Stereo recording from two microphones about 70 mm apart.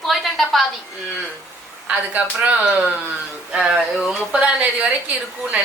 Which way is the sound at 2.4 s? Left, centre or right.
Centre.